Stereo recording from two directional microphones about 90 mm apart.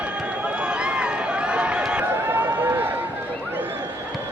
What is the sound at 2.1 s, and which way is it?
Run, 25° right (ahead or behind).